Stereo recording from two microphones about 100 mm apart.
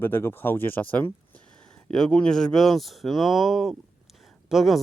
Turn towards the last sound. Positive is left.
turn(degrees=0)  # may be behind; listen again after turning